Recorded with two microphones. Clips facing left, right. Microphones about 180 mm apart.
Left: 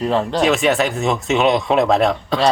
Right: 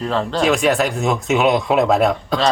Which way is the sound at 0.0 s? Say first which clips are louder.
Left 2 dB; 10° left (ahead or behind).